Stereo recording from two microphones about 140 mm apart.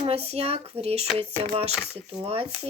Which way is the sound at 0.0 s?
45° right (ahead or behind).